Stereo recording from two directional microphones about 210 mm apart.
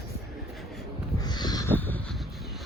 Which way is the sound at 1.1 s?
20° left (ahead or behind).